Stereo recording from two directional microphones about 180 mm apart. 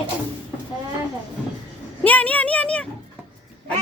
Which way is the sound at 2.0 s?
10° left (ahead or behind).